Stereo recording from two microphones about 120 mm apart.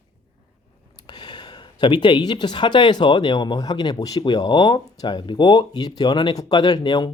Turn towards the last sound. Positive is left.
turn(degrees=40)  # may be behind; listen again after turning